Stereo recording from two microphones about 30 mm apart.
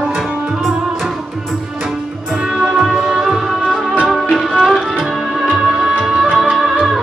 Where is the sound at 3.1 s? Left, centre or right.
Centre.